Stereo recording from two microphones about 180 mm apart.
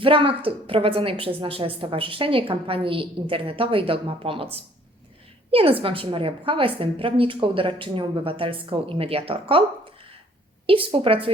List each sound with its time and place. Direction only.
0.0 s a woman's voice: 30° right (ahead or behind)
5.5 s a woman's voice: 30° right (ahead or behind)
10.7 s a woman's voice: 30° right (ahead or behind)